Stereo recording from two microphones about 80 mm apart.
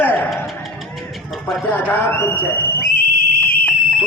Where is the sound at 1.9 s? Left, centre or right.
Left.